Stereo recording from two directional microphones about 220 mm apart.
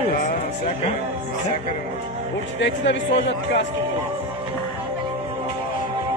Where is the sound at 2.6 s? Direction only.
55° left (ahead or behind).